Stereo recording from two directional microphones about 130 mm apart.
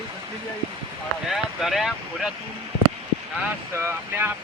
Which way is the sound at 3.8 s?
15° right (ahead or behind).